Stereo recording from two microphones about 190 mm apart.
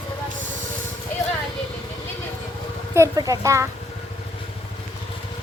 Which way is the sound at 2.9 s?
15° right (ahead or behind).